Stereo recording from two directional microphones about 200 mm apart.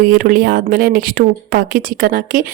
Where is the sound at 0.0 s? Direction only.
45° right (ahead or behind).